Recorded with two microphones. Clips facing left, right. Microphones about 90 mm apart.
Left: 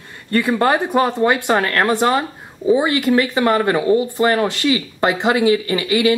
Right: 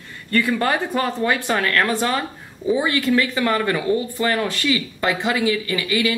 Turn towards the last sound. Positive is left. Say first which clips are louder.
# left 5 dB
turn(degrees=30)  # may be behind; listen again after turning